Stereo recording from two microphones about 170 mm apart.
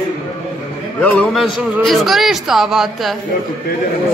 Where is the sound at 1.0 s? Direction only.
10° left (ahead or behind).